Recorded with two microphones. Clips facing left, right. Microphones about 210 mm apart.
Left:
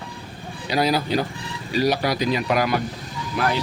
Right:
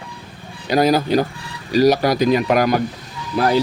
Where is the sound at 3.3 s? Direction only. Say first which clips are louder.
Right 6 dB; 35° right (ahead or behind).